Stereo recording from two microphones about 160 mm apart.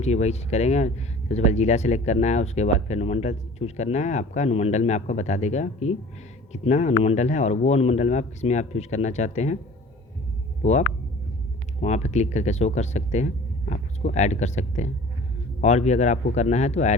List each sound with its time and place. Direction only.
0.0 s speech: 45° left (ahead or behind)
10.6 s speech: 45° left (ahead or behind)